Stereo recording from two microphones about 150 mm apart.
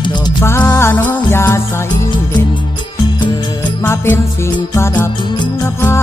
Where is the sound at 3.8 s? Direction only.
15° left (ahead or behind).